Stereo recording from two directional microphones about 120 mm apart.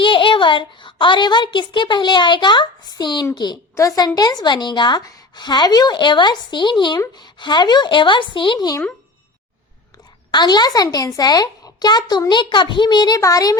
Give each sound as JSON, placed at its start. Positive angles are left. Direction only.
{"t": 0.0, "sound": "a child's voice", "side_deg": 45}
{"t": 10.3, "sound": "a woman's voice", "side_deg": 35}